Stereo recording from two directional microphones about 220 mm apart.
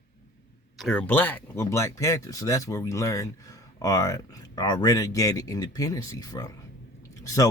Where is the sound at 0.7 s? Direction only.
Centre (ahead or behind).